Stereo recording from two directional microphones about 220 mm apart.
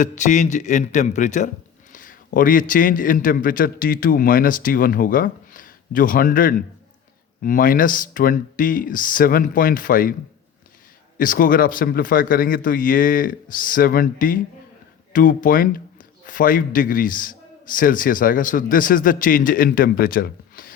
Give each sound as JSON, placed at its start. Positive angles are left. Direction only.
{"t": 0.0, "sound": "a man's voice", "side_deg": 35}
{"t": 11.2, "sound": "a man's voice", "side_deg": 40}